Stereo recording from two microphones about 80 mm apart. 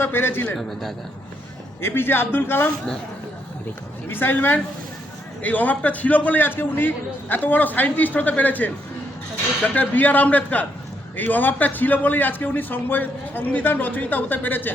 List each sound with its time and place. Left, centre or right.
0.0 s a man's voice: left
0.5 s a man's voice: centre
1.8 s a man's voice: left
4.1 s a man's voice: left